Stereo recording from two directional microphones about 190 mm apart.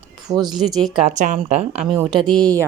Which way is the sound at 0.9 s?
30° right (ahead or behind).